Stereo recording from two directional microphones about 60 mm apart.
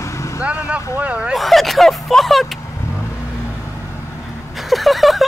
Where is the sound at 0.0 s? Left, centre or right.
Left.